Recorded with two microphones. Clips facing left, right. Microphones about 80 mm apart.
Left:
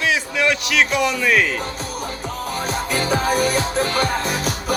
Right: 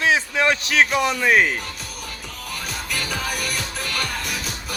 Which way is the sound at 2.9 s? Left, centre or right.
Left.